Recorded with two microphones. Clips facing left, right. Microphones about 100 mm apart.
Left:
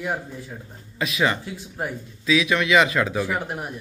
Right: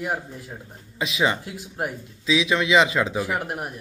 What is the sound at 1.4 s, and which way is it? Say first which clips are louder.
Speech: even; 10° right (ahead or behind).